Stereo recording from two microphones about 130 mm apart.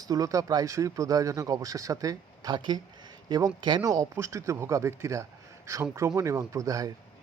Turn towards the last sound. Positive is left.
turn(degrees=-25)  # may be behind; listen again after turning